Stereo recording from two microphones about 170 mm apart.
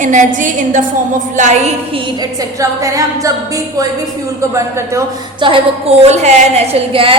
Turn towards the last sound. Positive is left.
turn(degrees=-35)  # may be behind; listen again after turning